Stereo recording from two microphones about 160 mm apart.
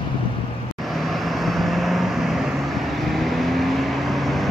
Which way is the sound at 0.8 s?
Centre (ahead or behind).